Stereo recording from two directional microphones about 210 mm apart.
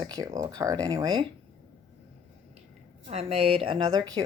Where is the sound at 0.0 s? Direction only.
20° right (ahead or behind).